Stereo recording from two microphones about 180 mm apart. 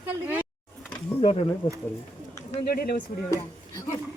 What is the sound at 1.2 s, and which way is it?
Speech, 40° left (ahead or behind).